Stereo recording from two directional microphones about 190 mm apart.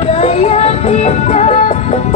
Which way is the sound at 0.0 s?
35° left (ahead or behind).